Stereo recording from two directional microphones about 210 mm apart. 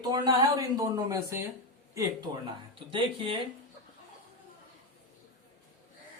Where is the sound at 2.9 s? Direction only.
25° right (ahead or behind).